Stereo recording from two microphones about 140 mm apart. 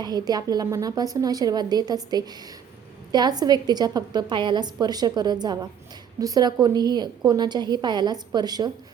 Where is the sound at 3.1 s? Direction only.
30° right (ahead or behind).